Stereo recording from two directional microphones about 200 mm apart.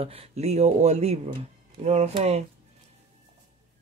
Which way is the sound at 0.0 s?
30° right (ahead or behind).